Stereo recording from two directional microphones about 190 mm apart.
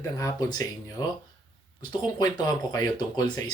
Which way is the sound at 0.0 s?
15° left (ahead or behind).